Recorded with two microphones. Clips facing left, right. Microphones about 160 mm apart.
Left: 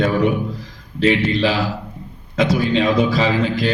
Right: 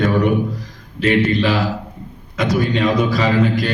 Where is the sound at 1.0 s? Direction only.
50° right (ahead or behind).